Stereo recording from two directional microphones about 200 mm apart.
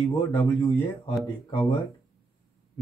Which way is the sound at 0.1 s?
20° left (ahead or behind).